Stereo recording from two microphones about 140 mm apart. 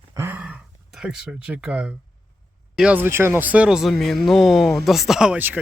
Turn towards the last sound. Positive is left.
turn(degrees=-10)  # may be behind; listen again after turning